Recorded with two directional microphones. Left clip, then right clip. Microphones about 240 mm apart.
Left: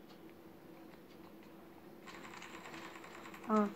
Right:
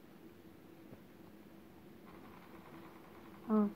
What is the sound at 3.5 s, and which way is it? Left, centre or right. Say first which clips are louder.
Speech: left 2 dB; left.